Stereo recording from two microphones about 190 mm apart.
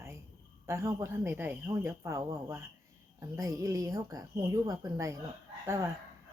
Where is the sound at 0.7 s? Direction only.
15° right (ahead or behind).